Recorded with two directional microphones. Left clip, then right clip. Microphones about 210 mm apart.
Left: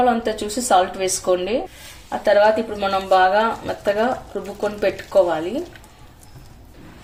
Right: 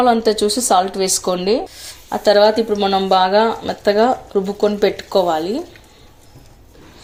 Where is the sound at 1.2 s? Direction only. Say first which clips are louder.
Right 2 dB; 30° right (ahead or behind).